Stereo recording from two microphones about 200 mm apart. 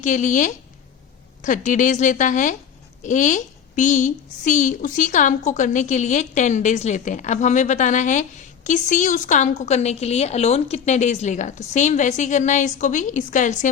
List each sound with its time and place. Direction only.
0.0 s a woman's voice: 40° left (ahead or behind)